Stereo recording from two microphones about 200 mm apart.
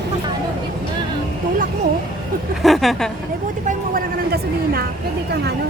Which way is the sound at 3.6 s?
50° right (ahead or behind).